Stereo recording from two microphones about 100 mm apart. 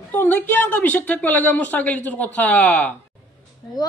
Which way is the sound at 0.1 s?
20° left (ahead or behind).